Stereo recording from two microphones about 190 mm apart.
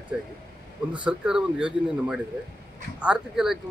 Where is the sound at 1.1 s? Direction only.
5° right (ahead or behind).